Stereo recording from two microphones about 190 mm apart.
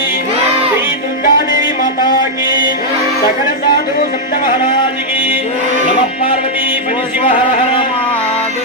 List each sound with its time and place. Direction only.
1.2 s music: 50° left (ahead or behind)